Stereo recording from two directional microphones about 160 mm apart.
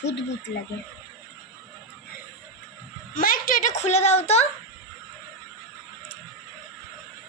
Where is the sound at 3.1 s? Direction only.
65° left (ahead or behind); by 4.4 s 45° left (ahead or behind).